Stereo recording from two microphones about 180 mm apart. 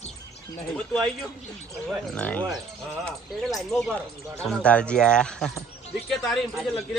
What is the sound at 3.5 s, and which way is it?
A man's voice, centre (ahead or behind).